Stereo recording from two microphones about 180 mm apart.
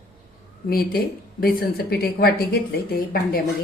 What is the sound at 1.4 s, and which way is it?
A woman's voice, 55° left (ahead or behind).